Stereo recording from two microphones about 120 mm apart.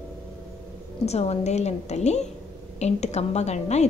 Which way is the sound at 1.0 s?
60° left (ahead or behind).